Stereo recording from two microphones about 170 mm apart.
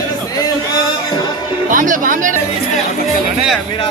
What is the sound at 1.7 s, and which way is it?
Music, 50° right (ahead or behind).